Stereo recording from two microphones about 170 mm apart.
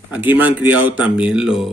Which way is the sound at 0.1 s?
10° right (ahead or behind).